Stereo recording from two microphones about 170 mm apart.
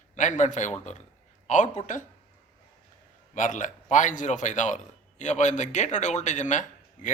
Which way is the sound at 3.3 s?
50° left (ahead or behind).